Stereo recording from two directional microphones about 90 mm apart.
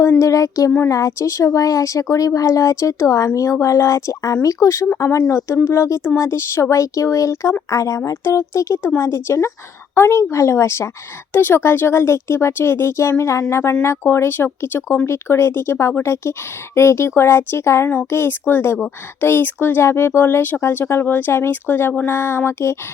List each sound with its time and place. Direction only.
0.0 s speech: 35° left (ahead or behind)